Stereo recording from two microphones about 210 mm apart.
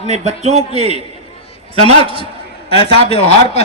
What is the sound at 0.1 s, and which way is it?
Speech, 30° right (ahead or behind).